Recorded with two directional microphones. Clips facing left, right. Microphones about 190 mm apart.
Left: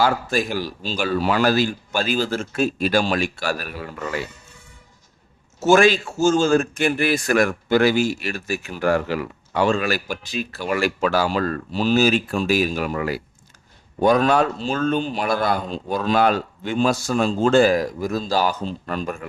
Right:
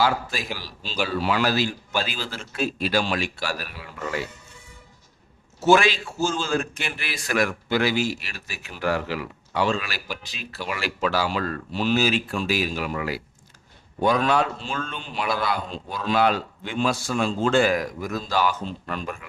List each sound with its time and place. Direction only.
0.0 s a man's voice: 50° left (ahead or behind)
5.5 s a man's voice: 45° left (ahead or behind)